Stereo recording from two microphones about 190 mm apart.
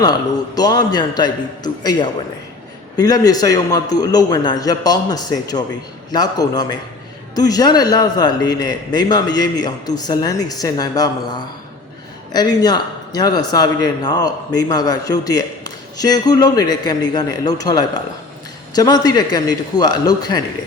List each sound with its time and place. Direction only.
0.5 s a man's voice: 20° left (ahead or behind)